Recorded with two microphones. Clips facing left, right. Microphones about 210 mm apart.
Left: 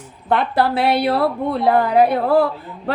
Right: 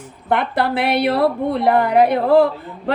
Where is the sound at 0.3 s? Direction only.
15° right (ahead or behind).